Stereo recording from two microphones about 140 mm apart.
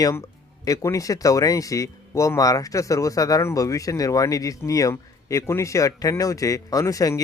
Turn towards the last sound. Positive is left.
turn(degrees=25)  # may be behind; listen again after turning